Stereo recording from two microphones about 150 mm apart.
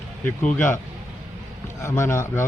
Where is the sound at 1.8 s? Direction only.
15° left (ahead or behind).